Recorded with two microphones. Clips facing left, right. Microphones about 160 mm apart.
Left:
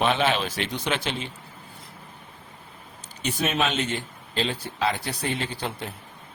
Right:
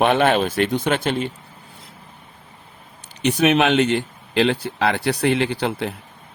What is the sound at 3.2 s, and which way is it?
Speech, 70° right (ahead or behind).